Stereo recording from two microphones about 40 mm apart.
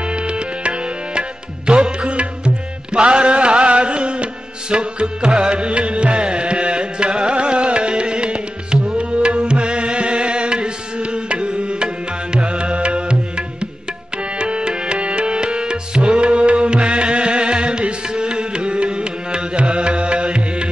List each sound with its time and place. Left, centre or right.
0.1 s tabla: right
1.7 s music: right
14.4 s music: right